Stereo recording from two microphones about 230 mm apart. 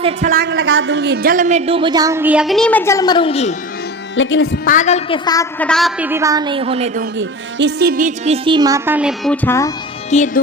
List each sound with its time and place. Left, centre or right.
0.0 s speech: right
0.5 s a woman's voice: right; by 3.5 s left
4.1 s speech: left
4.6 s a woman's voice: left; by 7.0 s right
7.0 s a woman's voice: right; by 9.7 s centre
10.1 s speech: left